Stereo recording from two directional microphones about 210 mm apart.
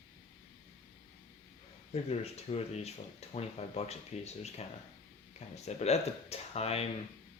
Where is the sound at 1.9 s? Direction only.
30° left (ahead or behind).